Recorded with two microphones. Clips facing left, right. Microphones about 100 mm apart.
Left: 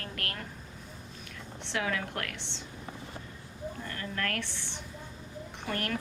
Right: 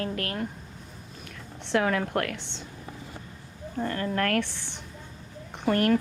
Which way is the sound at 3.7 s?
50° right (ahead or behind).